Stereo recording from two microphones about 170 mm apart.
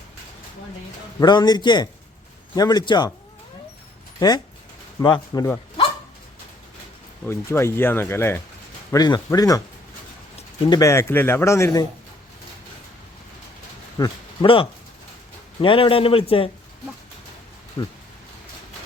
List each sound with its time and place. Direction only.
1.2 s a man's voice: 25° left (ahead or behind)
4.9 s a man's voice: 25° left (ahead or behind)
7.3 s a man's voice: 15° left (ahead or behind)
10.3 s a sound: 30° left (ahead or behind)
10.8 s a man's voice: 15° left (ahead or behind)
14.0 s a man's voice: 30° left (ahead or behind)
17.8 s a man's voice: 25° left (ahead or behind)